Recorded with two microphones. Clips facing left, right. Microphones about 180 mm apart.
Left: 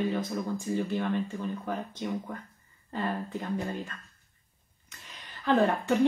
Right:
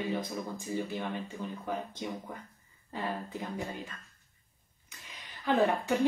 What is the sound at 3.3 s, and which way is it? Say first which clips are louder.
Speech: left 5 dB; 10° right (ahead or behind).